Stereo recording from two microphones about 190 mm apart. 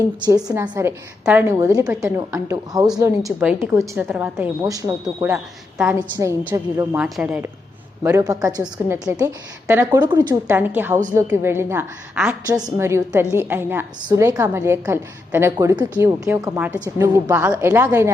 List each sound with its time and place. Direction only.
0.3 s a woman's voice: 20° right (ahead or behind)
5.0 s a woman's voice: 5° right (ahead or behind)
8.0 s a woman's voice: 20° right (ahead or behind)
10.8 s a woman's voice: 10° right (ahead or behind)
12.6 s a woman's voice: 15° right (ahead or behind)